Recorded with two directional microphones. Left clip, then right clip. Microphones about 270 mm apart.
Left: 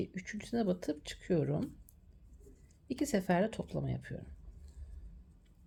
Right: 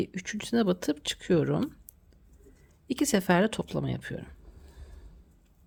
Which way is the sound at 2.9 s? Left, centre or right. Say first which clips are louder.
Right 7 dB; right.